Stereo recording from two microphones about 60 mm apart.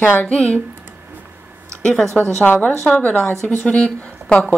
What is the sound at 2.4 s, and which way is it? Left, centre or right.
Speech, left.